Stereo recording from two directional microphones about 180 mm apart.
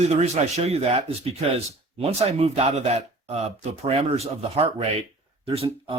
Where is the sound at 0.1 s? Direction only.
35° right (ahead or behind).